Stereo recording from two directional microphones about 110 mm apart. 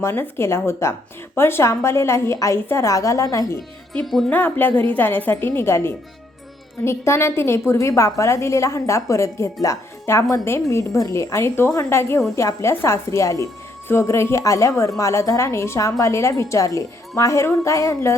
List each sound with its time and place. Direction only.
0.0 s a woman's voice: 20° left (ahead or behind)
4.0 s speech: centre (ahead or behind)
4.3 s a woman's voice: 15° left (ahead or behind)